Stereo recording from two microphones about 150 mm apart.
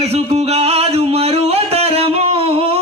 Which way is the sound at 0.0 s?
45° right (ahead or behind).